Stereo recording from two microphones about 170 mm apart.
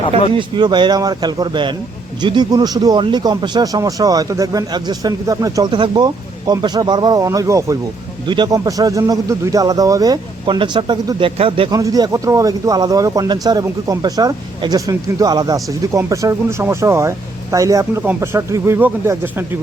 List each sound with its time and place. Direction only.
0.3 s speech: 25° right (ahead or behind)
11.8 s speech: 20° right (ahead or behind)